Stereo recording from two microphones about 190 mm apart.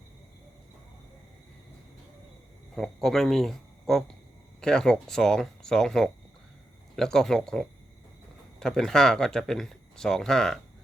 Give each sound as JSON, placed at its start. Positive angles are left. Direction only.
{"t": 2.7, "sound": "speech", "side_deg": 0}